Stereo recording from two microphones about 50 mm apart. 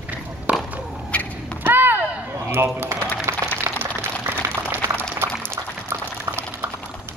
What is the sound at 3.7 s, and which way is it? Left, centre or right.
Boiling, right.